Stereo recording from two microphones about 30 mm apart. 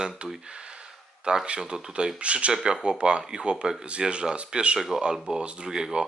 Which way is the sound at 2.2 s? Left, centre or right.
Right.